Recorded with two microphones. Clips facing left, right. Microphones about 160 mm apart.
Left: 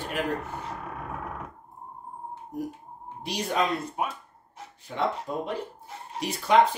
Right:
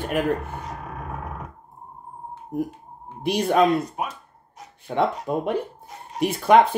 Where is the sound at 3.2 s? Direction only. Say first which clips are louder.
Right 8 dB; 55° right (ahead or behind).